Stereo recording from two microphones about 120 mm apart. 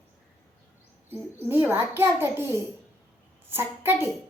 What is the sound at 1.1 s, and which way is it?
A child's voice, 15° right (ahead or behind).